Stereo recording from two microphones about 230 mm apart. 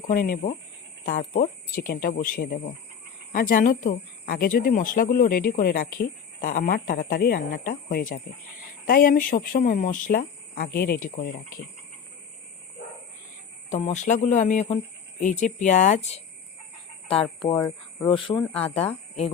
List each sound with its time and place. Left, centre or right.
0.1 s speech: left
13.7 s speech: left
17.5 s speech: centre